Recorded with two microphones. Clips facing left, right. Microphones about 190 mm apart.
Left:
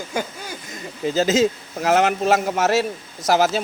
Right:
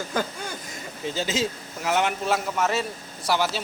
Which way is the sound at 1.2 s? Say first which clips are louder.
Left 10 dB; 40° left (ahead or behind).